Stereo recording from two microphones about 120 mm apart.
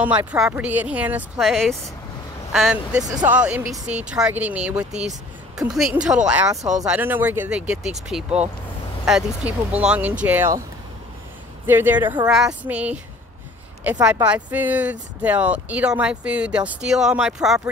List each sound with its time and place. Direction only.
0.0 s speech: 15° right (ahead or behind)
1.4 s speech: centre (ahead or behind); by 10.5 s 15° right (ahead or behind)
11.6 s speech: 15° right (ahead or behind)
12.3 s speech: 5° right (ahead or behind)
14.2 s speech: 10° right (ahead or behind)